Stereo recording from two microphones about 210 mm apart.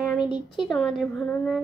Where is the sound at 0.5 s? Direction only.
Centre (ahead or behind).